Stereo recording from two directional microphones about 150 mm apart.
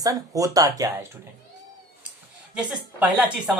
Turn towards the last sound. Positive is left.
turn(degrees=-5)  # may be behind; listen again after turning